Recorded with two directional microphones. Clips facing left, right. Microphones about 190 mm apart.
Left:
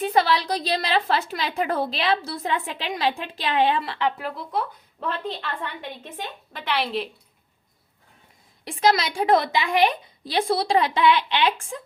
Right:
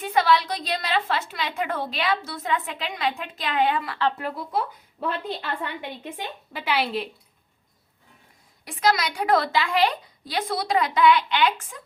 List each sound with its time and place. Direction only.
0.0 s a woman's voice: 30° left (ahead or behind)
4.2 s a woman's voice: centre (ahead or behind)
8.6 s a woman's voice: 25° left (ahead or behind)